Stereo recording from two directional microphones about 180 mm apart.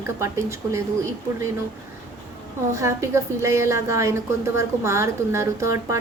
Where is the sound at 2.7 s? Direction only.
15° right (ahead or behind).